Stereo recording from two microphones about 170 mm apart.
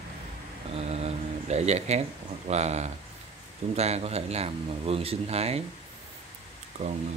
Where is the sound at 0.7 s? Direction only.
40° right (ahead or behind).